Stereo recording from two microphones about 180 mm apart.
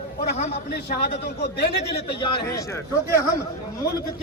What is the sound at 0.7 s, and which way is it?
A man's voice, 60° left (ahead or behind).